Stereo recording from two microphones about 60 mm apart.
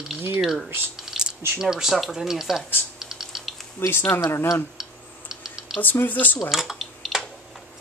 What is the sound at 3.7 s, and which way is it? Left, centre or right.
Speech, left.